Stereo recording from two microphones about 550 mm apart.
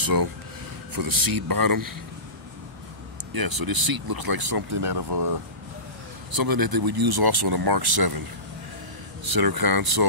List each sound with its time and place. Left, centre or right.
0.0 s speech: right
3.3 s speech: right
6.3 s speech: right
9.2 s speech: right